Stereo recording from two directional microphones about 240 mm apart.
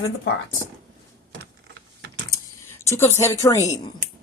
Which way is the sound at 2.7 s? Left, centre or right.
Centre.